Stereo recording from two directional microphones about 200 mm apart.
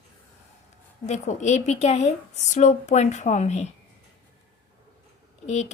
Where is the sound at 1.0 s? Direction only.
35° left (ahead or behind).